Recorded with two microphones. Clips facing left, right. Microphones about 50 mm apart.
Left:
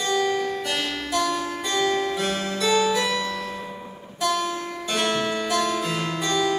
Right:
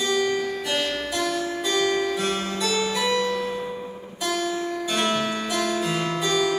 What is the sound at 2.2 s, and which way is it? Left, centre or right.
Harpsichord, right.